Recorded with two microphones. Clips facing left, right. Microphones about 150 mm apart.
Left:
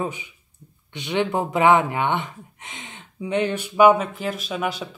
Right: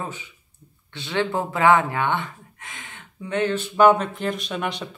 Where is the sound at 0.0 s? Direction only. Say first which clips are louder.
Left 5 dB; 15° left (ahead or behind).